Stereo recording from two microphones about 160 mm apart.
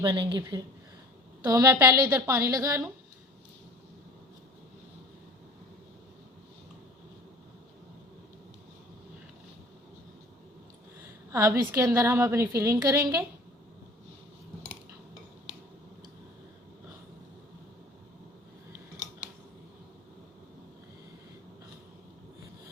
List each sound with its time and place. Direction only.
0.0 s a woman's voice: 25° right (ahead or behind)
11.3 s a woman's voice: 20° right (ahead or behind)